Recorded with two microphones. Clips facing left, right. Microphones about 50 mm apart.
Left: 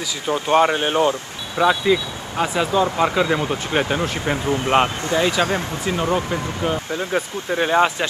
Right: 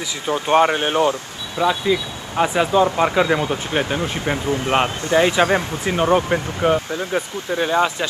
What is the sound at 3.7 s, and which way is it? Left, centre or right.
Speech, centre.